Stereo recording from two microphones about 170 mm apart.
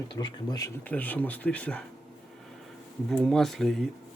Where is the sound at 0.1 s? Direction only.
25° left (ahead or behind).